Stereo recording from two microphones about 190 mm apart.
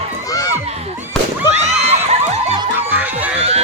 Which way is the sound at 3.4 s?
35° right (ahead or behind).